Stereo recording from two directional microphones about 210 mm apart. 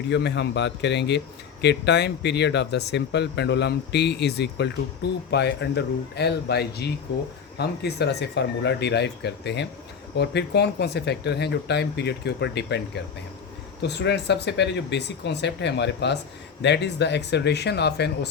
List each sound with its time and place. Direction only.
0.1 s speech: 55° left (ahead or behind)
13.8 s speech: 55° left (ahead or behind)